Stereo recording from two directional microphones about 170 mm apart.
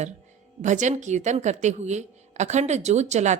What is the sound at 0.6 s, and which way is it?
A woman's voice, 45° right (ahead or behind).